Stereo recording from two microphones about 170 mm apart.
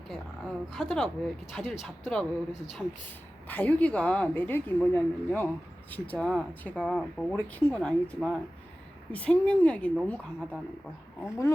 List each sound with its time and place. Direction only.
0.1 s speech: 5° left (ahead or behind)
3.5 s a woman's voice: 10° left (ahead or behind)